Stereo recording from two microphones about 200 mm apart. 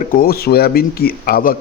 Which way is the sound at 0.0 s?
45° left (ahead or behind).